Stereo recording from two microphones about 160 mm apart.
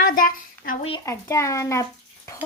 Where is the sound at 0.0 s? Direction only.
60° left (ahead or behind).